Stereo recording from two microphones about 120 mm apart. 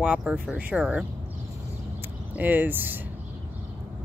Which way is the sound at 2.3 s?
15° right (ahead or behind).